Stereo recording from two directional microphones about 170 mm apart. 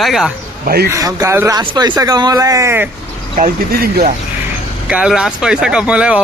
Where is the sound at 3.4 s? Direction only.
55° right (ahead or behind).